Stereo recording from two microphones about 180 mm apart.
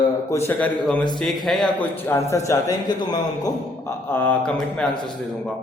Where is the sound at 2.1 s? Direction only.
15° left (ahead or behind).